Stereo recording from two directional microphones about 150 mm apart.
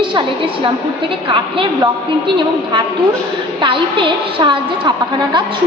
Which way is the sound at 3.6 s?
35° right (ahead or behind).